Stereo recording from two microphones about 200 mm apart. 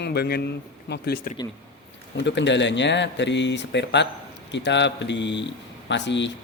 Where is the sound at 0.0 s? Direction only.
55° left (ahead or behind).